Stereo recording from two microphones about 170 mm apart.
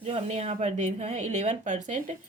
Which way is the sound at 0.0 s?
40° right (ahead or behind).